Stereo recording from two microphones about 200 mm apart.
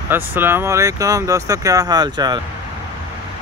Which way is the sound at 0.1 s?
10° right (ahead or behind).